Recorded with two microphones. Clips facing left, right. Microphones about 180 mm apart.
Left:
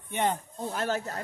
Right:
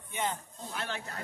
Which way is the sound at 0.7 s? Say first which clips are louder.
Left 8 dB; 40° left (ahead or behind).